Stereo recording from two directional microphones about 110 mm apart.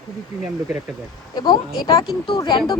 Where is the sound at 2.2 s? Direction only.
45° left (ahead or behind).